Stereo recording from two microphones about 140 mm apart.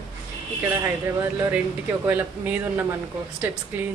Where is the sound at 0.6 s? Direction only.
20° right (ahead or behind).